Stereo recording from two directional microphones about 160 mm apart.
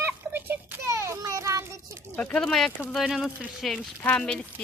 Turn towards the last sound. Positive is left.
turn(degrees=5)  # may be behind; listen again after turning